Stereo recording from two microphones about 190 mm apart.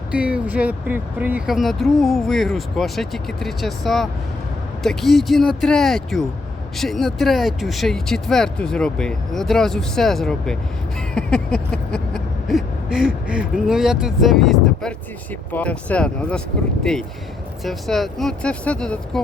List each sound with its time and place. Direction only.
0.1 s speech: 5° right (ahead or behind)
11.1 s owl: 5° left (ahead or behind)
15.5 s speech: 5° left (ahead or behind)